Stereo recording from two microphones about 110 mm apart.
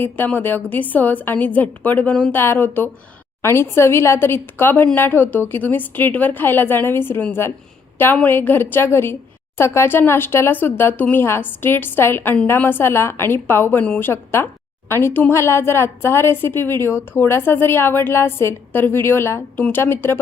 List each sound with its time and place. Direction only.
0.0 s a woman's voice: 20° left (ahead or behind)
14.1 s a woman's voice: 20° left (ahead or behind)